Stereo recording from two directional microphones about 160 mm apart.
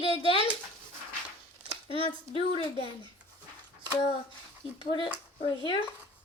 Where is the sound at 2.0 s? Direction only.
35° left (ahead or behind).